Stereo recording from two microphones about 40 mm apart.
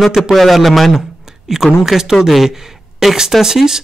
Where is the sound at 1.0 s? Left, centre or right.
Centre.